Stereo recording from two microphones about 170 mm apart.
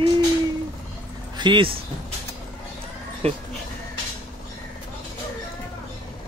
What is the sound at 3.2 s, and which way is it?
Speech, 35° right (ahead or behind).